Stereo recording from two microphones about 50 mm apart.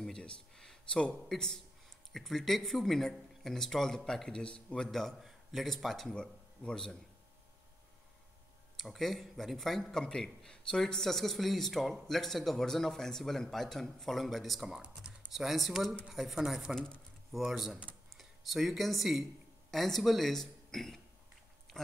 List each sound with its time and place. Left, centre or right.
0.0 s speech: centre
4.7 s speech: centre
6.0 s speech: centre
8.7 s a man's voice: centre
16.7 s a sound: centre
17.5 s a man's voice: centre
21.7 s a sound: centre